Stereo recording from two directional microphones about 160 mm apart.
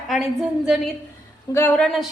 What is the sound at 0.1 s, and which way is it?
Speech, centre (ahead or behind).